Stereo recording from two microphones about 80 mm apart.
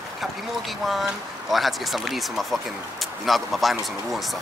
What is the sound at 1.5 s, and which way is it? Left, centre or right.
Speech, centre.